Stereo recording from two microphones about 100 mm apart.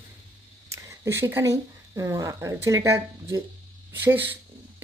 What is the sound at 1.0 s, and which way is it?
A woman's voice, 25° right (ahead or behind).